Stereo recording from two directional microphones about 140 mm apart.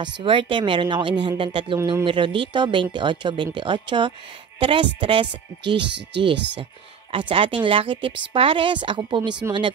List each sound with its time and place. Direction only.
0.0 s speech: 35° right (ahead or behind)